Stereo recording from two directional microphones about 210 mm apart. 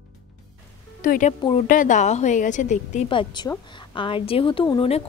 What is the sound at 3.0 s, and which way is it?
A woman's voice, 20° left (ahead or behind).